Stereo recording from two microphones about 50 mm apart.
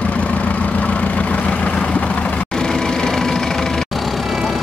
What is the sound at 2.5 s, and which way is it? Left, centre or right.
Engine, centre.